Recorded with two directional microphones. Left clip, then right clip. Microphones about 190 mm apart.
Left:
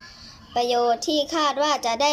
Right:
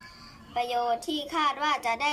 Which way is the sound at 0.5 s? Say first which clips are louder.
Left 6 dB; 25° left (ahead or behind).